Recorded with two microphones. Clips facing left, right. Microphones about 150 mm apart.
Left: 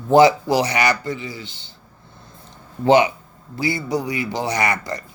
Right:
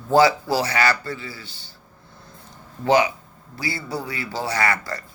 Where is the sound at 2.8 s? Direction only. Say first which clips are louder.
Left 4 dB; 25° left (ahead or behind).